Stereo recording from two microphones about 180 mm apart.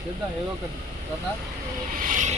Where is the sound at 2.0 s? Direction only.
45° right (ahead or behind).